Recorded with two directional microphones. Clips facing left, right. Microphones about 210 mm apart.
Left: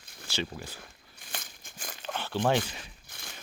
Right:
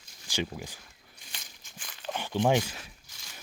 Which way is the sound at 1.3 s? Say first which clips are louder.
Left 8 dB; 55° left (ahead or behind).